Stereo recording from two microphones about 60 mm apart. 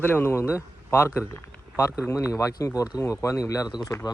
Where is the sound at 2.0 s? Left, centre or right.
Left.